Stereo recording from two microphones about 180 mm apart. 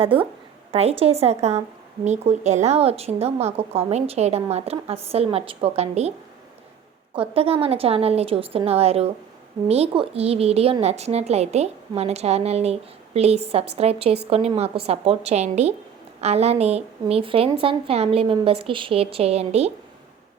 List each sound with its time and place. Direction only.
0.0 s a woman's voice: 30° right (ahead or behind)